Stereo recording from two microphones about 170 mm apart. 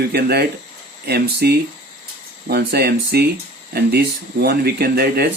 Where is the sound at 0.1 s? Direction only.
65° right (ahead or behind).